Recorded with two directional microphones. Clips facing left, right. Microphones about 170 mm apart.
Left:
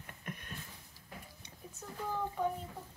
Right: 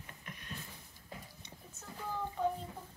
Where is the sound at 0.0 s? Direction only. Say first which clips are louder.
Left 4 dB; 50° left (ahead or behind).